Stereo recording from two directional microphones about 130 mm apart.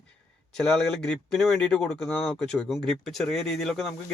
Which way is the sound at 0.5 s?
5° left (ahead or behind).